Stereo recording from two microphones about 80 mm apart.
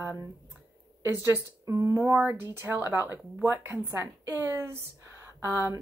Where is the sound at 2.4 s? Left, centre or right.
Right.